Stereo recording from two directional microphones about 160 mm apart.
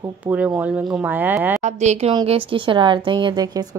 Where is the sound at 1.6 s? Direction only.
45° right (ahead or behind); by 3.6 s 25° right (ahead or behind).